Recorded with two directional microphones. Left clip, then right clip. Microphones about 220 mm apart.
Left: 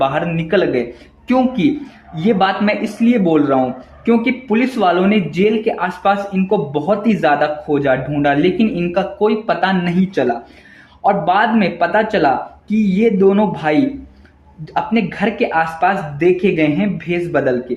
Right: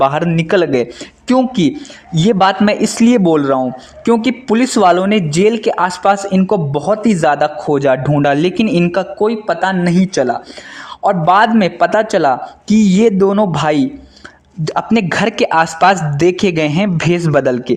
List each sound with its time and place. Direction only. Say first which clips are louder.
0.0 s speech: right 4 dB; 50° right (ahead or behind)